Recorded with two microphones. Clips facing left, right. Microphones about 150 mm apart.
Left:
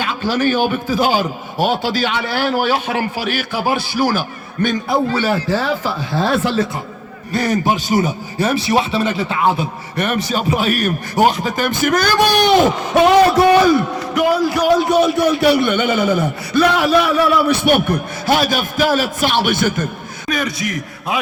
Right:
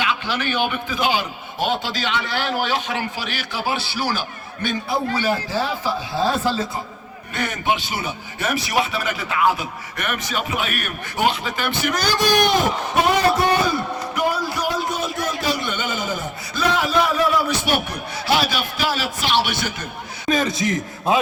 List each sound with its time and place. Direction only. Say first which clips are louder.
0.0 s a man's voice: left 6 dB; 40° left (ahead or behind); by 6.7 s 70° left (ahead or behind)
7.3 s a man's voice: left 6 dB; 35° left (ahead or behind)
20.2 s a man's voice: right 1 dB; 25° right (ahead or behind)